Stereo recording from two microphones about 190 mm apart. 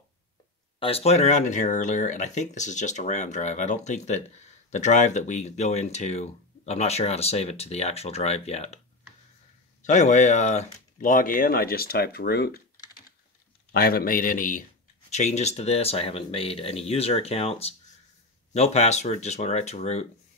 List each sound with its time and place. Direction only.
0.7 s speech: 30° left (ahead or behind)
9.8 s speech: 40° left (ahead or behind); by 12.5 s 55° left (ahead or behind)
13.7 s speech: 50° left (ahead or behind); by 20.1 s 35° left (ahead or behind)